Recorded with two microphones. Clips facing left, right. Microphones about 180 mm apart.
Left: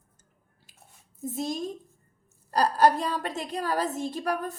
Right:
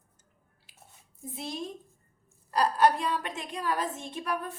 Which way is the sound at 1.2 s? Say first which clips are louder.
Left 6 dB; 45° left (ahead or behind).